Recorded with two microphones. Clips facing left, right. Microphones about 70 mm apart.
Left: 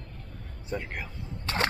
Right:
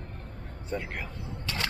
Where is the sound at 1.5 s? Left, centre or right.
Left.